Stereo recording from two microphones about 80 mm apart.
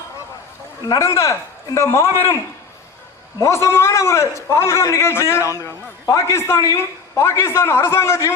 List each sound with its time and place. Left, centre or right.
0.9 s a man's voice: left
3.4 s a man's voice: left